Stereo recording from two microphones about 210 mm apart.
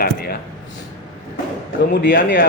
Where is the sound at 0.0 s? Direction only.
45° left (ahead or behind).